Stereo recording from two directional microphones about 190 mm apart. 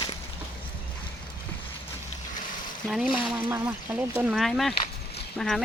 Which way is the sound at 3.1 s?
10° right (ahead or behind).